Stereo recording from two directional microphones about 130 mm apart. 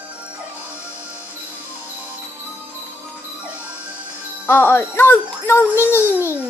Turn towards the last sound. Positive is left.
turn(degrees=20)  # may be behind; listen again after turning